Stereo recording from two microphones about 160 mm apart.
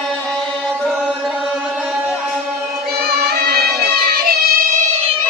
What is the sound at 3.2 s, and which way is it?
Music, 80° right.